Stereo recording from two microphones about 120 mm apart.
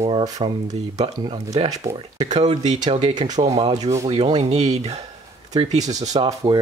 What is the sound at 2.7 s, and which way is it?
Speech, 35° right (ahead or behind).